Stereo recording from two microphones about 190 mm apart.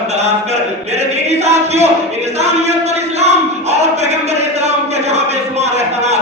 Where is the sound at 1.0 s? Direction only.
35° right (ahead or behind).